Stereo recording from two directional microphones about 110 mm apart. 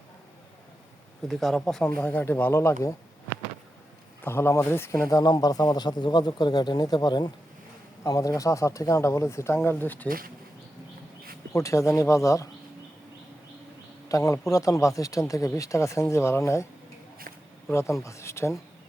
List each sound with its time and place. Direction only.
1.3 s speech: centre (ahead or behind); by 10.1 s 15° left (ahead or behind)
11.5 s speech: 30° left (ahead or behind)
14.1 s speech: 30° left (ahead or behind)
17.7 s speech: 25° left (ahead or behind)